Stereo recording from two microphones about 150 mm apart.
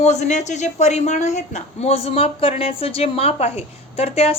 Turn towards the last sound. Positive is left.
turn(degrees=40)  # may be behind; listen again after turning